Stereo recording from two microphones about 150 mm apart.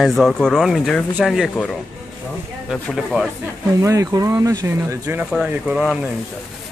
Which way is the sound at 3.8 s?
20° right (ahead or behind).